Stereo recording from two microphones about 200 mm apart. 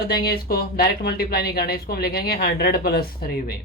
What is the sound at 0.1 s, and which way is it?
Speech, 50° left (ahead or behind).